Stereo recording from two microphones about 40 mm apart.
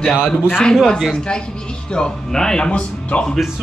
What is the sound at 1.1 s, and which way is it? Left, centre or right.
A man's voice, left.